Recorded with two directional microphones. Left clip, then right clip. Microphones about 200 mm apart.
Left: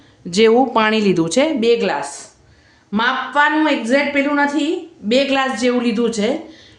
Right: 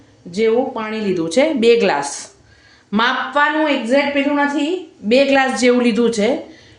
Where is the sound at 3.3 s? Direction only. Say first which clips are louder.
Left 2 dB; 20° left (ahead or behind).